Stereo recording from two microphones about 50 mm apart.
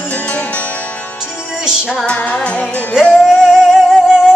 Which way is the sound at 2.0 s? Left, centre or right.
Left.